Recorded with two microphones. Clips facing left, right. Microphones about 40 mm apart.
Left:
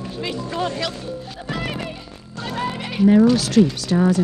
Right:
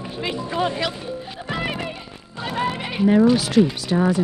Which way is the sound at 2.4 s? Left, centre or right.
Centre.